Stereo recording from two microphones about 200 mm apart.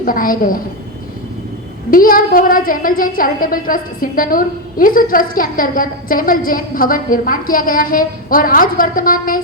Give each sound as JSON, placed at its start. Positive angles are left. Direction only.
{"t": 0.0, "sound": "a woman's voice", "side_deg": 45}
{"t": 1.9, "sound": "a woman's voice", "side_deg": 45}